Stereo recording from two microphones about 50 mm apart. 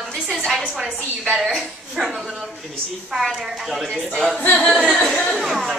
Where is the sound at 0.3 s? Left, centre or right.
Centre.